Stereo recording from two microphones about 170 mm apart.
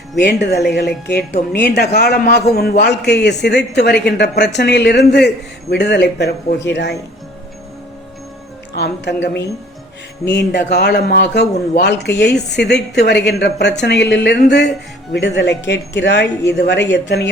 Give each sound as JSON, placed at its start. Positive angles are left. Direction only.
{"t": 0.2, "sound": "a man's voice", "side_deg": 75}
{"t": 8.7, "sound": "a man's voice", "side_deg": 75}
{"t": 10.2, "sound": "speech", "side_deg": 90}